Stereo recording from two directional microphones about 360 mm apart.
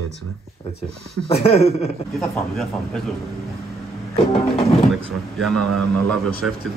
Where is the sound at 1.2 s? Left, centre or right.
Centre.